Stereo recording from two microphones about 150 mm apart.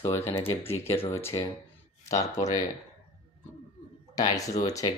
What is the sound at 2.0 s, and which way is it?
Speech, 50° left (ahead or behind).